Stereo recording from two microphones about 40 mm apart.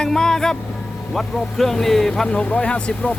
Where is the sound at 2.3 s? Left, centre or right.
Left.